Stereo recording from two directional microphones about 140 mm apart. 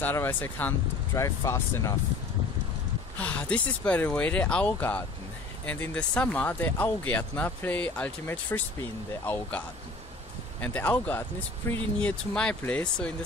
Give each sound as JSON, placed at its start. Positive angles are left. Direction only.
{"t": 0.0, "sound": "speech", "side_deg": 15}
{"t": 3.2, "sound": "speech", "side_deg": 10}
{"t": 10.6, "sound": "speech", "side_deg": 10}